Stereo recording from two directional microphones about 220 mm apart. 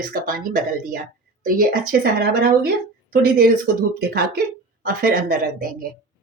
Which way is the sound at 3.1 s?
40° right (ahead or behind).